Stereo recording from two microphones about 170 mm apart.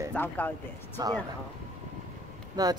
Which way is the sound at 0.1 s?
10° left (ahead or behind).